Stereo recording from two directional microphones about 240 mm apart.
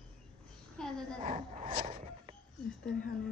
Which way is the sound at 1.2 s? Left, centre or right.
Right.